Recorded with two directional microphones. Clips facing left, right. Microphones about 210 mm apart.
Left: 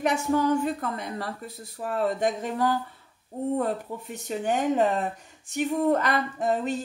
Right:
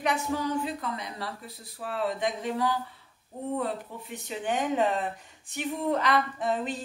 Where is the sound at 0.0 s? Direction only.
50° left (ahead or behind).